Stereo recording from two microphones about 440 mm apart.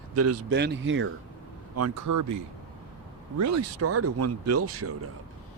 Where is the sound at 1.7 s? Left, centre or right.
Right.